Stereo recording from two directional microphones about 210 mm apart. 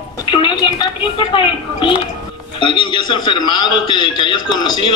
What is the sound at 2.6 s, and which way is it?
A man's voice, 20° left (ahead or behind).